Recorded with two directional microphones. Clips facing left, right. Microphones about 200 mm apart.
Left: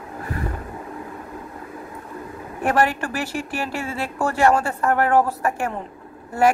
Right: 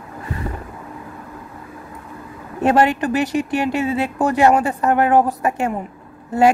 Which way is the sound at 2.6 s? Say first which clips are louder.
Right 5 dB; 20° right (ahead or behind).